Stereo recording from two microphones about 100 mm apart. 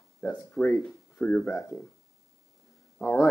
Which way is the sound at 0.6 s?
15° left (ahead or behind).